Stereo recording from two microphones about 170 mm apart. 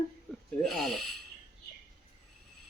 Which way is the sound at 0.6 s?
Centre (ahead or behind).